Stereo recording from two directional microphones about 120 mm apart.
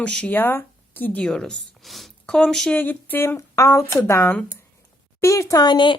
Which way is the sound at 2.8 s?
15° left (ahead or behind).